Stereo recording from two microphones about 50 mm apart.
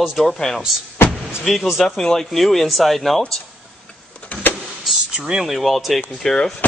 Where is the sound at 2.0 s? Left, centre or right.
Centre.